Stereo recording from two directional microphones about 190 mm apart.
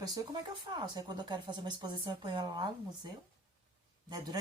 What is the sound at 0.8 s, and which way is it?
Speech, 20° right (ahead or behind).